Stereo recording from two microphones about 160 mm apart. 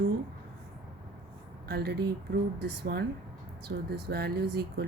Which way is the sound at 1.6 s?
80° right.